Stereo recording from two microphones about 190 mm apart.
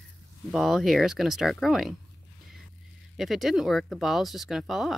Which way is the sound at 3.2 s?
Centre (ahead or behind).